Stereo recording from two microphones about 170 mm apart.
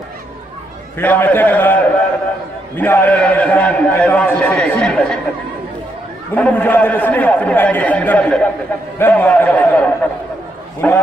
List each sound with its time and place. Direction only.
0.9 s a man's voice: 10° left (ahead or behind)
6.3 s a man's voice: 10° left (ahead or behind)